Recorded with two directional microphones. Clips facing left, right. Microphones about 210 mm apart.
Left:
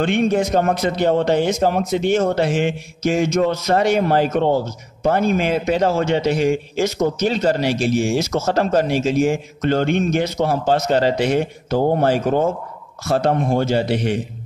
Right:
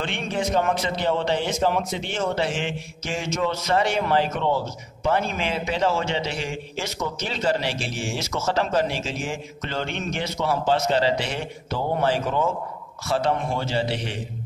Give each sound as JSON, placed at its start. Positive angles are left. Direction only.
{"t": 0.0, "sound": "speech", "side_deg": 45}